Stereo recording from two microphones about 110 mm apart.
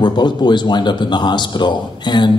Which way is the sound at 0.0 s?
45° left (ahead or behind).